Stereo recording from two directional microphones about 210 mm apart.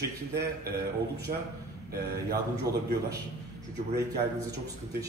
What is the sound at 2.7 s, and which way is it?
Speech, 15° right (ahead or behind).